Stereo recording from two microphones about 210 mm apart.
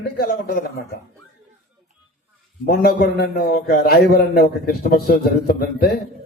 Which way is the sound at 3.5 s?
45° left (ahead or behind).